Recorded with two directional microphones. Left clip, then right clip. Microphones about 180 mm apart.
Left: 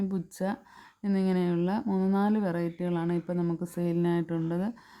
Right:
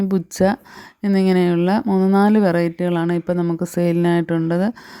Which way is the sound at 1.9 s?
25° right (ahead or behind).